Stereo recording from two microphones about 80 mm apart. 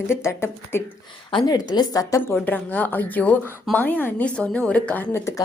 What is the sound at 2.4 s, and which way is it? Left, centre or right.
A woman's voice, left.